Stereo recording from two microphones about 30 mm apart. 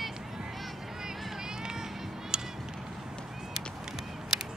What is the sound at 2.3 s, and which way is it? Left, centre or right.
Music, right.